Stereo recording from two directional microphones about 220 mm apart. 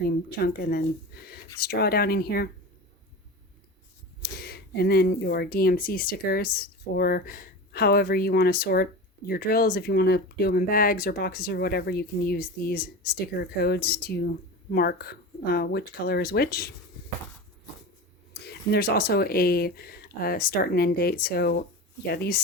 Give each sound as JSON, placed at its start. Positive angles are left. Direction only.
{"t": 0.0, "sound": "speech", "side_deg": 45}
{"t": 4.2, "sound": "speech", "side_deg": 45}
{"t": 18.3, "sound": "speech", "side_deg": 45}